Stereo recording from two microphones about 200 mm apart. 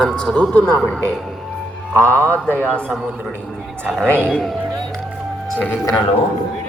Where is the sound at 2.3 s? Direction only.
10° left (ahead or behind).